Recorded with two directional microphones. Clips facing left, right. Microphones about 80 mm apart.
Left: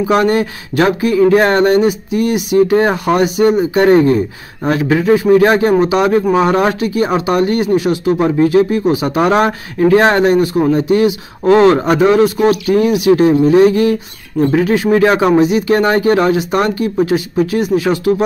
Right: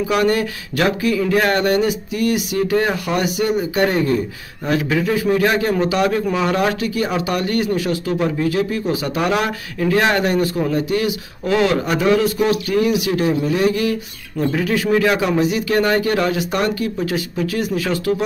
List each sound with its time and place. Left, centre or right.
0.1 s speech: left